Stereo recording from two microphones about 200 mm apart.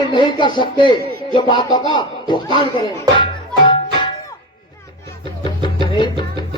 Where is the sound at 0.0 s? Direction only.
25° left (ahead or behind).